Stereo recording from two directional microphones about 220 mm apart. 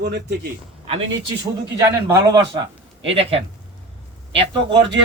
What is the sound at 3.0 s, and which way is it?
A man's voice, 25° right (ahead or behind).